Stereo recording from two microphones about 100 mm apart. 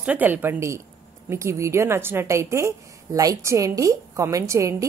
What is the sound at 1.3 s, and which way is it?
A woman's voice, 30° right (ahead or behind).